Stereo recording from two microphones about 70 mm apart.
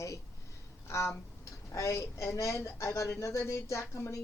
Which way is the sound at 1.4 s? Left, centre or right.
Left.